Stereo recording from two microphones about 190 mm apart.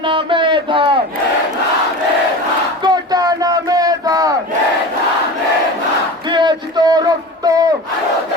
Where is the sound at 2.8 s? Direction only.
20° right (ahead or behind).